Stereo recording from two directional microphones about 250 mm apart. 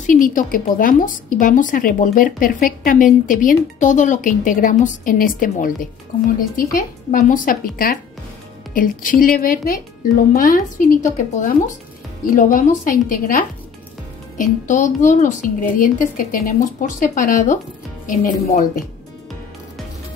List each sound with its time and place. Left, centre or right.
0.0 s a woman's voice: left